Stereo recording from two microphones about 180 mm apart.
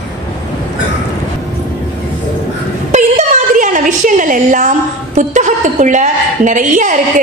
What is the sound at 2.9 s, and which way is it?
A woman's voice, 45° right (ahead or behind).